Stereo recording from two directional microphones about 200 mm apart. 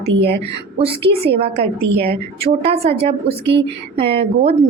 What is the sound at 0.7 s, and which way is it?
Speech, 25° right (ahead or behind).